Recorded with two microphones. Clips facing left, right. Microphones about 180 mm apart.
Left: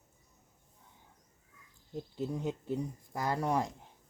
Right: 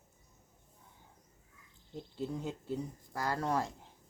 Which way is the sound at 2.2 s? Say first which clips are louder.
Left 2 dB; 20° left (ahead or behind).